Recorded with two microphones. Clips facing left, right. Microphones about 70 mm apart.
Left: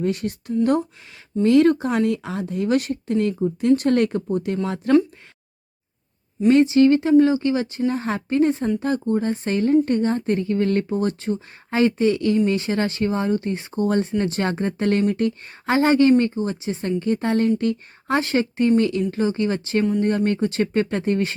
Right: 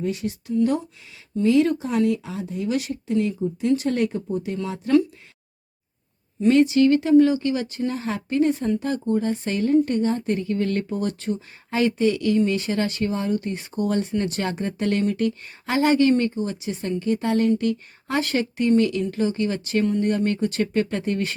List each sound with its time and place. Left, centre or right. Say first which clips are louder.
0.0 s speech: left 3 dB; left
6.5 s speech: left 2 dB; left